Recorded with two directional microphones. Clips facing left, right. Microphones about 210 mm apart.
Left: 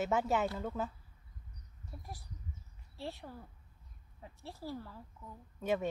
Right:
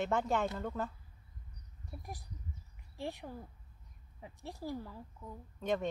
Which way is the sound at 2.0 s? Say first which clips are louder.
Right 2 dB; 15° right (ahead or behind).